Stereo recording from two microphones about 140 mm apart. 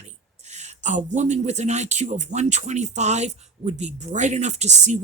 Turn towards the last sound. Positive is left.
turn(degrees=-55)  # may be behind; listen again after turning